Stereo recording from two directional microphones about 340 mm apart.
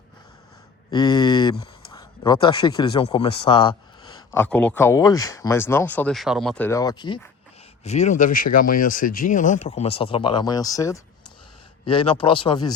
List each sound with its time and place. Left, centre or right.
0.9 s speech: centre